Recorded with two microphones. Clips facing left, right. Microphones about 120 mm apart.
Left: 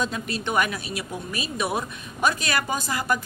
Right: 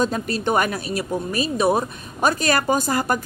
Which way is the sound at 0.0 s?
40° right (ahead or behind).